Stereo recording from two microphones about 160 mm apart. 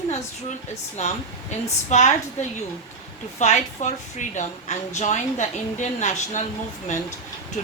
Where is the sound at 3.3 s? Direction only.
45° left (ahead or behind).